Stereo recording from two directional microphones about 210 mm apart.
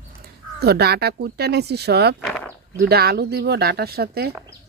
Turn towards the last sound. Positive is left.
turn(degrees=-50)  # may be behind; listen again after turning